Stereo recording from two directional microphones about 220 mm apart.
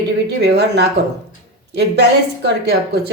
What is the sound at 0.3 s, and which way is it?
A woman's voice, 50° right (ahead or behind).